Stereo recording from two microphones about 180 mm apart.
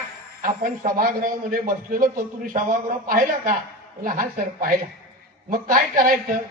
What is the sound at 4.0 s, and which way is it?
Speech, 50° right (ahead or behind).